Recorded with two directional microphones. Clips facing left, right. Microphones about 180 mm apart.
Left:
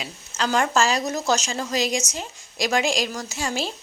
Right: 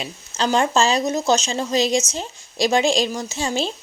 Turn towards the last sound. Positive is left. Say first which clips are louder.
# right 4 dB
turn(degrees=-20)  # may be behind; listen again after turning